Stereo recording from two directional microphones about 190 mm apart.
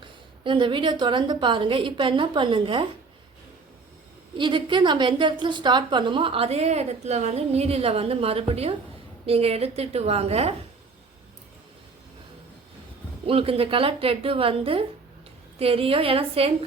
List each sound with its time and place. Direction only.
0.0 s a woman's voice: 25° right (ahead or behind)
4.4 s a woman's voice: 25° right (ahead or behind)
13.2 s a woman's voice: 30° right (ahead or behind)